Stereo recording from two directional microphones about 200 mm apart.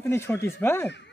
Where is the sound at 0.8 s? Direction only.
60° left (ahead or behind).